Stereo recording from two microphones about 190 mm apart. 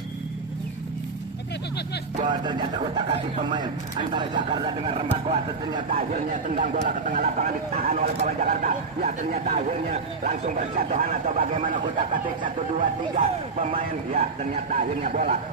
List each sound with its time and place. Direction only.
2.4 s speech: 25° right (ahead or behind)
6.1 s speech: 45° right (ahead or behind)
8.0 s speech: 45° right (ahead or behind)